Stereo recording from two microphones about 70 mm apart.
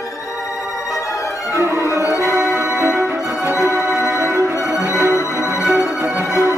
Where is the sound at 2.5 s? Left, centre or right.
Right.